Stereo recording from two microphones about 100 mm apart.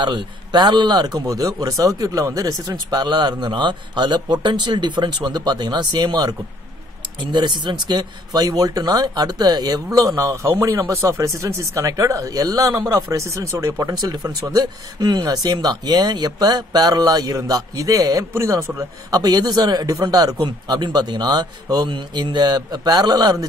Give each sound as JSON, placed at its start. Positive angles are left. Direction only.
{"t": 0.0, "sound": "speech", "side_deg": -50}
{"t": 7.3, "sound": "speech", "side_deg": -50}
{"t": 9.9, "sound": "speech", "side_deg": -30}